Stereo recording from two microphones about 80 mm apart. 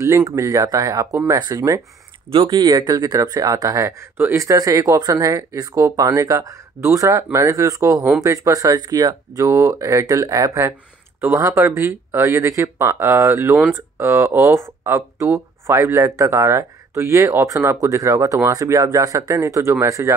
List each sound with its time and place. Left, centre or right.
0.0 s speech: right
2.3 s speech: right
8.7 s speech: right
9.4 s speech: right